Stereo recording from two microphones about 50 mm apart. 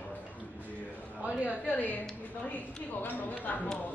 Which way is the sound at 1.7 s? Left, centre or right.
Left.